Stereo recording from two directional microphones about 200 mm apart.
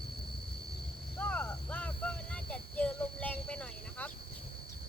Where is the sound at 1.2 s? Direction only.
10° left (ahead or behind).